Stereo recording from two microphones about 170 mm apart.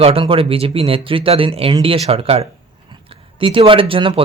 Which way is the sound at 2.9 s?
30° right (ahead or behind).